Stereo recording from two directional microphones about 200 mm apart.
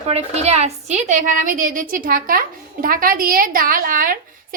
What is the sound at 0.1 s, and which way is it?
A woman's voice, 30° right (ahead or behind).